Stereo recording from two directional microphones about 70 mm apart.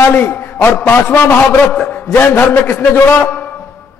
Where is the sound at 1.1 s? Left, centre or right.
Left.